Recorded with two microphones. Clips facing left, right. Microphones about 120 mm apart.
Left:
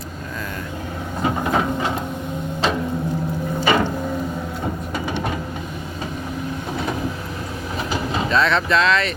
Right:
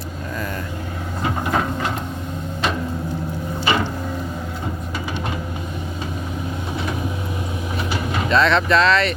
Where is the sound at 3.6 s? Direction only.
45° left (ahead or behind).